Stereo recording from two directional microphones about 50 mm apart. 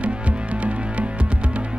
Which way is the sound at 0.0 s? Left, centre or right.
Right.